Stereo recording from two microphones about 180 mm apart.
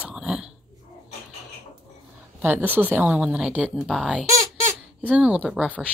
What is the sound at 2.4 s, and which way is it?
A woman's voice, 10° right (ahead or behind).